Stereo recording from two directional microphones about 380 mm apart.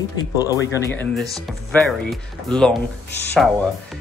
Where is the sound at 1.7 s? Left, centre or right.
Centre.